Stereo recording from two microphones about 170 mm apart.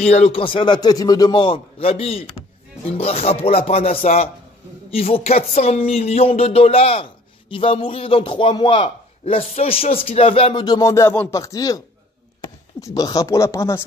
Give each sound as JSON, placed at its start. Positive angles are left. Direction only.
{"t": 0.0, "sound": "speech", "side_deg": 40}
{"t": 12.8, "sound": "speech", "side_deg": 20}